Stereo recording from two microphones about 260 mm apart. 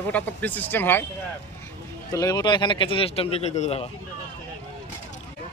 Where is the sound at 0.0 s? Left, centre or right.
Centre.